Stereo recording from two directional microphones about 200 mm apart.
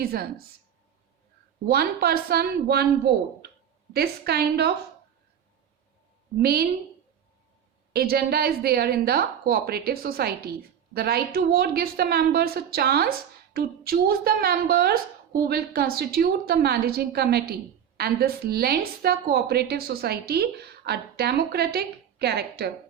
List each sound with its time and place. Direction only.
0.0 s a woman's voice: 50° right (ahead or behind)
1.6 s a woman's voice: 50° right (ahead or behind)
6.4 s a woman's voice: 50° right (ahead or behind)
7.9 s a woman's voice: 50° right (ahead or behind)